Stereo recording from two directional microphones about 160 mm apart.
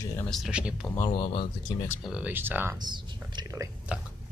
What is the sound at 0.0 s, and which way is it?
Speech, 20° left (ahead or behind).